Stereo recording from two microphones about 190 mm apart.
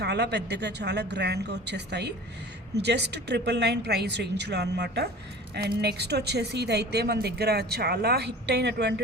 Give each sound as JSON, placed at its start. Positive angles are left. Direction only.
{"t": 0.0, "sound": "a woman's voice", "side_deg": -60}